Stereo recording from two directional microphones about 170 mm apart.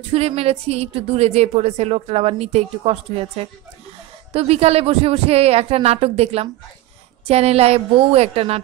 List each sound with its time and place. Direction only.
0.1 s a woman's voice: 35° right (ahead or behind)